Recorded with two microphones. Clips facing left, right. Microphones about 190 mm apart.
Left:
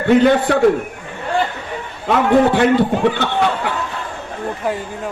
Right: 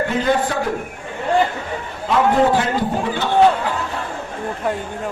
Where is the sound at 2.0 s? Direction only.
65° left (ahead or behind).